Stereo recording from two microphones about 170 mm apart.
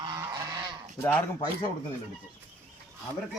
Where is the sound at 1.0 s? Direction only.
10° left (ahead or behind).